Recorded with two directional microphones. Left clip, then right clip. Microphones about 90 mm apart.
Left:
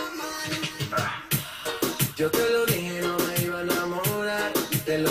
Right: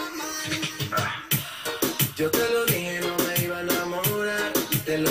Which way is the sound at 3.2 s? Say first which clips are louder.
Right 1 dB; 30° right (ahead or behind).